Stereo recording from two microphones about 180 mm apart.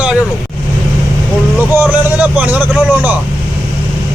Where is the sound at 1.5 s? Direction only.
10° right (ahead or behind).